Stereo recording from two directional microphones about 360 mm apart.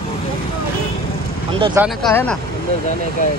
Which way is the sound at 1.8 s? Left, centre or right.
Centre.